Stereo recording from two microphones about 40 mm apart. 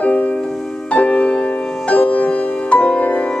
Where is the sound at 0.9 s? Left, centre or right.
Left.